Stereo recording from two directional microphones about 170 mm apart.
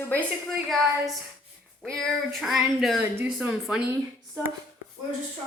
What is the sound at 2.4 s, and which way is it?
Speech, centre (ahead or behind).